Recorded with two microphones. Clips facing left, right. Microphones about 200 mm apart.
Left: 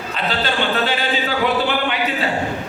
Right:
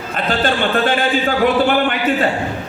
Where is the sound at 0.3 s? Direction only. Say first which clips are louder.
Right 4 dB; 50° right (ahead or behind).